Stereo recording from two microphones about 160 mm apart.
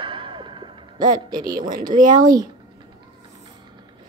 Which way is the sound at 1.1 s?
25° right (ahead or behind).